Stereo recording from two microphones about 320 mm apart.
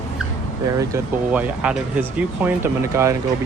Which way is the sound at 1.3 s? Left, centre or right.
Centre.